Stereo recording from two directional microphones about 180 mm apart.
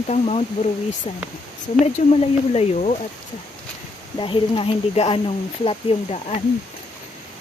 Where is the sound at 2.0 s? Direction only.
40° left (ahead or behind).